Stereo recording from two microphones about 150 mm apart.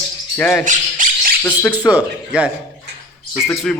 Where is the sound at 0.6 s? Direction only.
60° right (ahead or behind).